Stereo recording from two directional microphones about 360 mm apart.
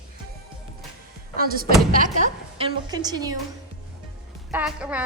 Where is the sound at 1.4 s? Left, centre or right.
Right.